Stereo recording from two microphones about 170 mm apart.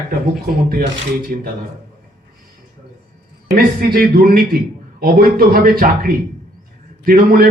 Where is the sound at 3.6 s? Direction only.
60° right (ahead or behind).